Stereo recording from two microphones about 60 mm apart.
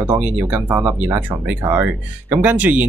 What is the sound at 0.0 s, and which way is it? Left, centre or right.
Speech, right.